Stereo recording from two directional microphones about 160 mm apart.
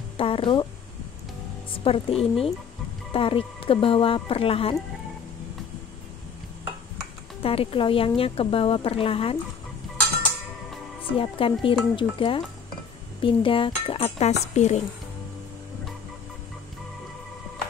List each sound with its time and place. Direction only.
0.2 s a woman's voice: 35° left (ahead or behind)
1.7 s a woman's voice: 35° left (ahead or behind)
7.4 s a woman's voice: 35° left (ahead or behind)
11.0 s a woman's voice: 35° left (ahead or behind)